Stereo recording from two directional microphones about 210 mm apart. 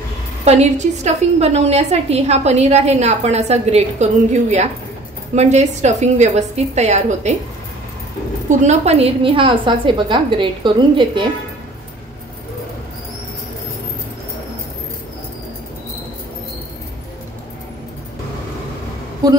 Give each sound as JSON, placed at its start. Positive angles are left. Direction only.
{"t": 0.5, "sound": "a woman's voice", "side_deg": -30}
{"t": 8.5, "sound": "a woman's voice", "side_deg": -30}
{"t": 19.2, "sound": "a woman's voice", "side_deg": -20}